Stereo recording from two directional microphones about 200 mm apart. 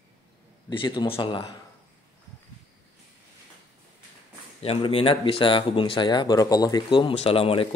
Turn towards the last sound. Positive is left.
turn(degrees=30)  # may be behind; listen again after turning